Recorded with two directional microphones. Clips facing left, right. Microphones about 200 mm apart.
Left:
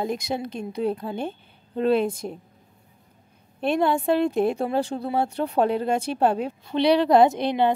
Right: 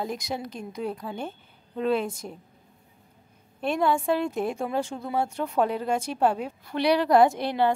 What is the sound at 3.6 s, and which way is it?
A woman's voice, 25° left (ahead or behind).